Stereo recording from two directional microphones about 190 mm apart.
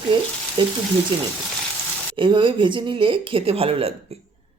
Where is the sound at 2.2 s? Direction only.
25° right (ahead or behind).